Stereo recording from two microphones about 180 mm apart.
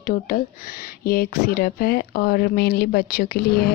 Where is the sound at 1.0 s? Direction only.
55° left (ahead or behind).